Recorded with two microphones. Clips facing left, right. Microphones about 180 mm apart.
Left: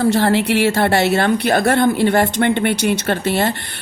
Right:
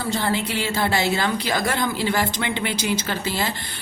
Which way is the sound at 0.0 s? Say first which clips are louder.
Left 9 dB; 70° left (ahead or behind).